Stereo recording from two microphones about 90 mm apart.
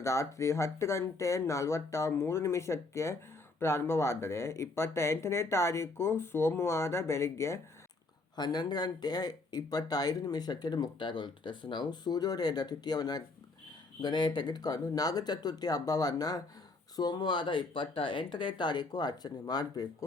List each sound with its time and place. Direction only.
0.0 s speech: 35° left (ahead or behind)
8.4 s speech: 50° left (ahead or behind)